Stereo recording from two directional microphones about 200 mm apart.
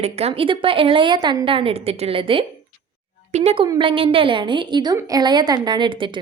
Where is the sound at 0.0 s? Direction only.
30° right (ahead or behind).